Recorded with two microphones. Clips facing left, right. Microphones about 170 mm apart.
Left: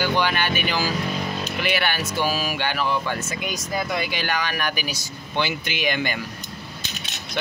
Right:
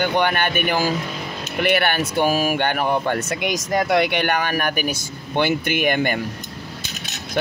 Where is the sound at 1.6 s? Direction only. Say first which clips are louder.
Right 7 dB; 55° right (ahead or behind).